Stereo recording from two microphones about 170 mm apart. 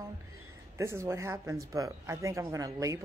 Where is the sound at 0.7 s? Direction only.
15° right (ahead or behind).